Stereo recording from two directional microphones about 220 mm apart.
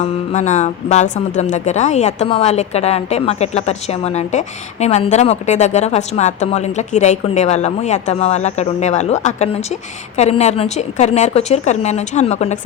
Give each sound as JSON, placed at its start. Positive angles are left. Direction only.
{"t": 0.0, "sound": "speech", "side_deg": 35}